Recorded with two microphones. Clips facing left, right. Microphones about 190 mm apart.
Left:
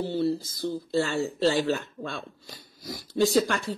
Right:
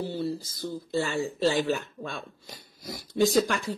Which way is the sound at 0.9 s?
15° right (ahead or behind).